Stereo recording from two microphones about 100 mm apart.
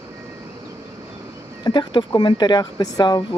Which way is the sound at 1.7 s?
45° left (ahead or behind).